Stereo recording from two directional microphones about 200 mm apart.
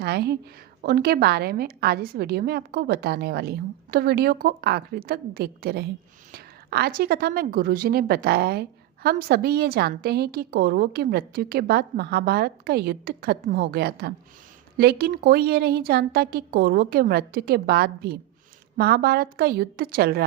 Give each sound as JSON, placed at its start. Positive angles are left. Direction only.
{"t": 0.0, "sound": "a woman's voice", "side_deg": -55}